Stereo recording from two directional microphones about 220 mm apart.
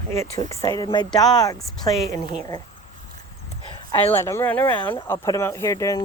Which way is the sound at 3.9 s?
10° left (ahead or behind).